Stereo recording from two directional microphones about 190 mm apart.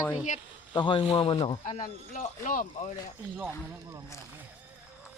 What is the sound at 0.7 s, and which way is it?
Speech, 25° left (ahead or behind).